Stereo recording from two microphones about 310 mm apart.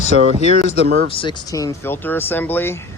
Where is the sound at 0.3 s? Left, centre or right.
Left.